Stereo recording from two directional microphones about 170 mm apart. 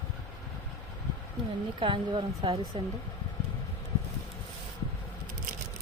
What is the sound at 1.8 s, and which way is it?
A woman's voice, 30° right (ahead or behind).